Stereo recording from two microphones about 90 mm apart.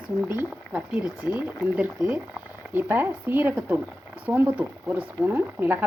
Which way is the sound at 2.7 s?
25° right (ahead or behind).